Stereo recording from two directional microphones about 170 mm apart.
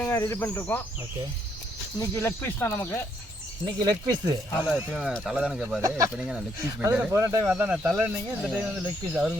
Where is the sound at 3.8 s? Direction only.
20° right (ahead or behind).